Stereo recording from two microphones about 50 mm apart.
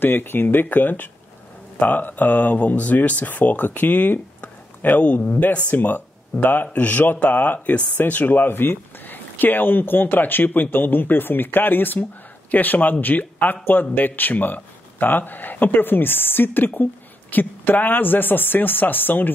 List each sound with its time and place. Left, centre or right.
0.0 s speech: left